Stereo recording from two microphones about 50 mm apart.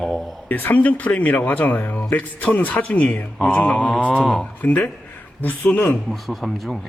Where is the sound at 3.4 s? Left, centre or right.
Left.